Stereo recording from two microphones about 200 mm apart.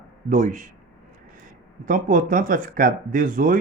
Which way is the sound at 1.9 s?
40° right (ahead or behind).